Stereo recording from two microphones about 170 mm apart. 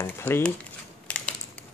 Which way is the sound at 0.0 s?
10° left (ahead or behind).